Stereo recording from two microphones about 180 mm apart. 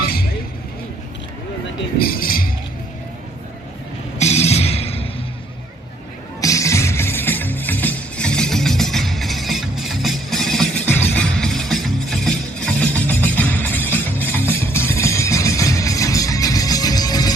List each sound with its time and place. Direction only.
0.0 s a sound: 60° left (ahead or behind)
2.0 s speech: 55° left (ahead or behind)
4.2 s music: 35° left (ahead or behind)
6.4 s music: 15° left (ahead or behind)